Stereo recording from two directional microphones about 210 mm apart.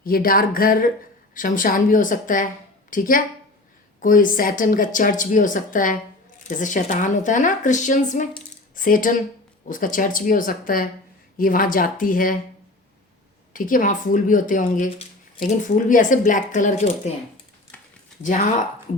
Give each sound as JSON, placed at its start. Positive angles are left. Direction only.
{"t": 0.0, "sound": "speech", "side_deg": 45}
{"t": 13.5, "sound": "speech", "side_deg": 40}
{"t": 17.7, "sound": "a sound", "side_deg": 10}
{"t": 18.2, "sound": "speech", "side_deg": 35}